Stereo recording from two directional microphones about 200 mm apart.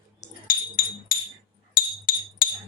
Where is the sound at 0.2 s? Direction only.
45° left (ahead or behind).